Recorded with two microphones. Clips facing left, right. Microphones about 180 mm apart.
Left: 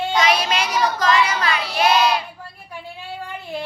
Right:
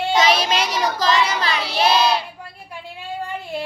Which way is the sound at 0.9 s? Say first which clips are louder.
Left 1 dB; 35° right (ahead or behind).